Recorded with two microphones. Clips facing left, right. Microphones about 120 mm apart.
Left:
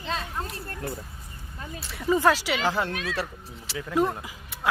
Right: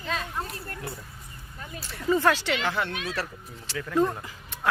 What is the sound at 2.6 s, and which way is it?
Speech, 35° left (ahead or behind).